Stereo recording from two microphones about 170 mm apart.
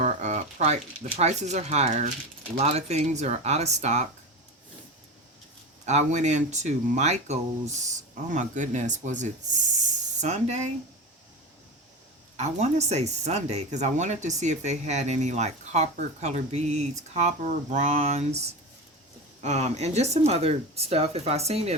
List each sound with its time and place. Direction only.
0.0 s speech: 45° right (ahead or behind)
5.8 s speech: 40° right (ahead or behind)
12.4 s speech: 40° right (ahead or behind)